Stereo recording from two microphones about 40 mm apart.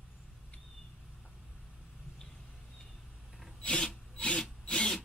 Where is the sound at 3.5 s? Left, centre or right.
Left.